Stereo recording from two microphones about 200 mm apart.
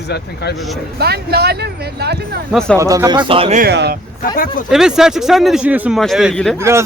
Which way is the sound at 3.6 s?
55° right (ahead or behind).